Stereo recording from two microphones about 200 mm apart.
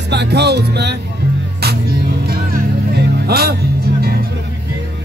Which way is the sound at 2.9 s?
50° right (ahead or behind).